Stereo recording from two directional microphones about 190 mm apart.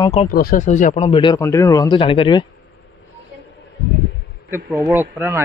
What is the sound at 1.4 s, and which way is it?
Speech, 15° left (ahead or behind).